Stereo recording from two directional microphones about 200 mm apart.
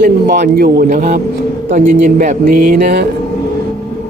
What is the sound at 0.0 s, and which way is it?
A man's voice, 45° right (ahead or behind).